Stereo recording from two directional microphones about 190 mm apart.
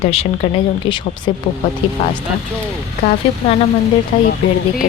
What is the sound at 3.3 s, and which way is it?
Speech, 25° left (ahead or behind).